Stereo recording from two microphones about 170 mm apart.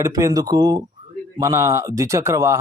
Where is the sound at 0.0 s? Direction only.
20° right (ahead or behind).